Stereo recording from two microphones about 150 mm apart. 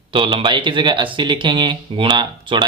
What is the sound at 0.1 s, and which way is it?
Speech, 35° right (ahead or behind).